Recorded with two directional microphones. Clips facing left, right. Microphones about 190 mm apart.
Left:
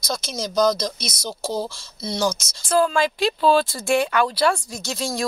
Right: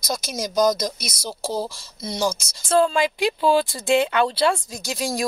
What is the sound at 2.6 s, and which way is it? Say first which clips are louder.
Speech: right 1 dB; 25° right (ahead or behind).